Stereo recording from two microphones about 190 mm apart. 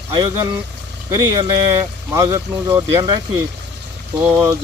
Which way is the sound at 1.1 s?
20° right (ahead or behind).